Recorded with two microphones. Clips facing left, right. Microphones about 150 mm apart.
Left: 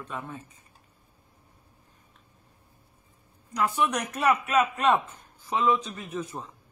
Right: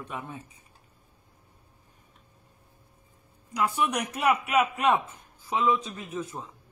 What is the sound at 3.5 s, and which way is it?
A man's voice, 10° right (ahead or behind).